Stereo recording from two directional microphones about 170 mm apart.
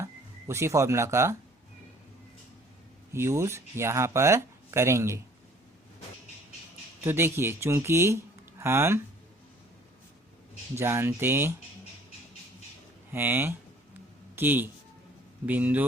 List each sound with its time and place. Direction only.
0.0 s speech: 15° right (ahead or behind)
3.1 s speech: 15° right (ahead or behind)
7.0 s speech: 15° right (ahead or behind)
10.8 s speech: 15° right (ahead or behind)
13.1 s a sound: 10° right (ahead or behind)
15.4 s speech: 10° right (ahead or behind)